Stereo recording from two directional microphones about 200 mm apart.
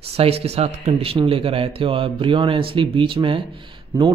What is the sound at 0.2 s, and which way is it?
Speech, 30° right (ahead or behind).